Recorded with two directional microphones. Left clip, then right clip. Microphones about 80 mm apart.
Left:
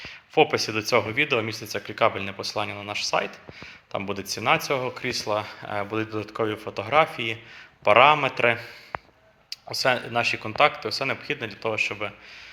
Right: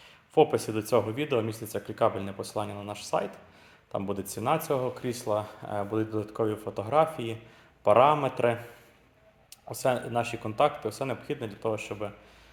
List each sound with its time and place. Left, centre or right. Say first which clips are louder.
0.0 s speech: left 3 dB; right
9.7 s speech: left 4 dB; right